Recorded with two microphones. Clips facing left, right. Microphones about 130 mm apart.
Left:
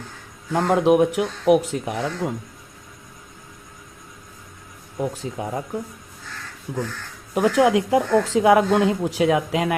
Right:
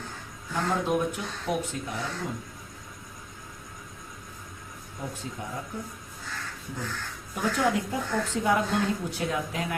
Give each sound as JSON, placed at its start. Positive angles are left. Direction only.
{"t": 0.5, "sound": "speech", "side_deg": 80}
{"t": 4.9, "sound": "speech", "side_deg": 90}
{"t": 7.3, "sound": "speech", "side_deg": 90}